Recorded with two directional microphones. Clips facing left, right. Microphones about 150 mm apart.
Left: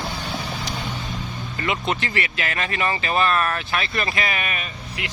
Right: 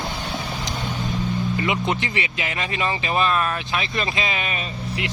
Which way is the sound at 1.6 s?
15° right (ahead or behind).